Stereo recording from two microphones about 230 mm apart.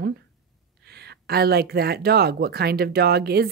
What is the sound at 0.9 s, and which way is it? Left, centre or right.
Speech, right.